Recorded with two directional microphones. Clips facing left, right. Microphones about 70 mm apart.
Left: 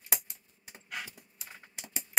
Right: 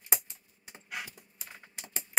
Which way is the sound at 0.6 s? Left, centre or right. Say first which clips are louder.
Right 1 dB; centre.